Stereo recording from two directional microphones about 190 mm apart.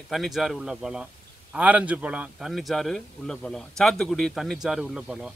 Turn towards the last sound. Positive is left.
turn(degrees=-5)  # may be behind; listen again after turning